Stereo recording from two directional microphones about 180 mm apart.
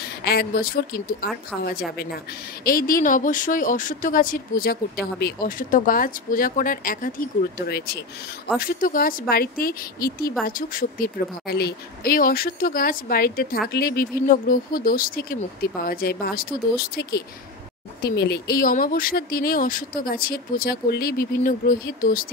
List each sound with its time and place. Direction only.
0.0 s a woman's voice: 65° left (ahead or behind)